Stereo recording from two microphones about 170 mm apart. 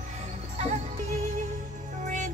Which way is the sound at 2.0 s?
50° right (ahead or behind).